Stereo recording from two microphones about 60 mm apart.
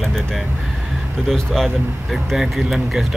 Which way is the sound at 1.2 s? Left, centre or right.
Centre.